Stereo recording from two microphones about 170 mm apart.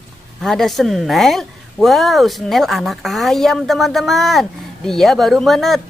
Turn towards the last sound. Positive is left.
turn(degrees=0)  # may be behind; listen again after turning